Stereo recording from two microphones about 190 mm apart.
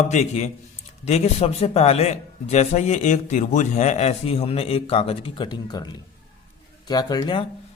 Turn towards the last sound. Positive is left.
turn(degrees=20)  # may be behind; listen again after turning